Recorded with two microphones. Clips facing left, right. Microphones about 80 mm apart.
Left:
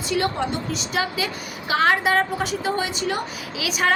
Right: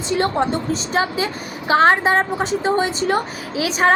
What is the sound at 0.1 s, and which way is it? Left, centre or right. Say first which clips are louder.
A woman's voice: right 5 dB; right.